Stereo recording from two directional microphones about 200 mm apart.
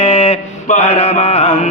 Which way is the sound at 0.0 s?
30° left (ahead or behind).